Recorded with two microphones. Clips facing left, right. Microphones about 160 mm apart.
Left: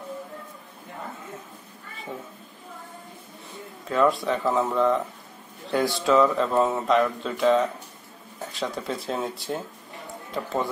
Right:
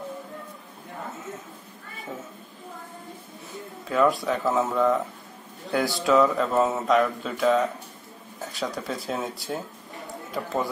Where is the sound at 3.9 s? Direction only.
Centre (ahead or behind).